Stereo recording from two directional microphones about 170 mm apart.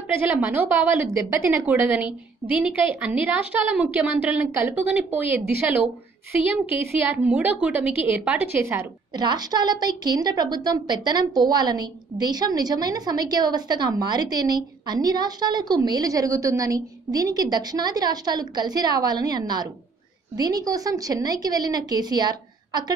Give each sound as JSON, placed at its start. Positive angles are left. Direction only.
{"t": 0.1, "sound": "a woman's voice", "side_deg": -10}
{"t": 6.4, "sound": "a woman's voice", "side_deg": -10}
{"t": 9.1, "sound": "a woman's voice", "side_deg": -25}